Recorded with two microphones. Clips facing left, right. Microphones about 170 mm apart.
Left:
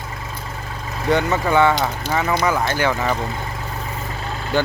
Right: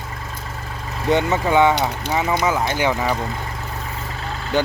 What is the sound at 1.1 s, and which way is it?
Speech, 20° right (ahead or behind).